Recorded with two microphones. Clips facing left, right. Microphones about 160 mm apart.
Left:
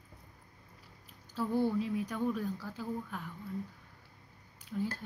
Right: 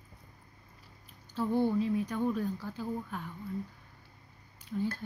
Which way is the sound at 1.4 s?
20° right (ahead or behind).